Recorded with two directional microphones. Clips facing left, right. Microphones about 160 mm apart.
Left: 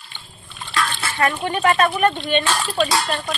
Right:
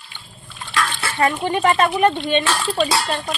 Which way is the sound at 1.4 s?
20° right (ahead or behind).